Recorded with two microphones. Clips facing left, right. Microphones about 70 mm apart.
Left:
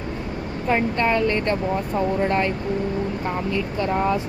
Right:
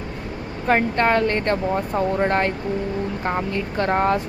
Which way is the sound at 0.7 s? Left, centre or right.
Right.